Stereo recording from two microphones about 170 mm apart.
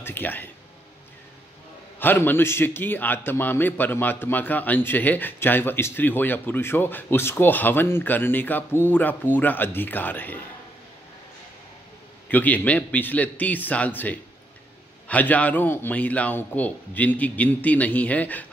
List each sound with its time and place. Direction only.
0.0 s a sound: 10° left (ahead or behind)
2.0 s a man's voice: 10° left (ahead or behind)
12.3 s a man's voice: 10° left (ahead or behind)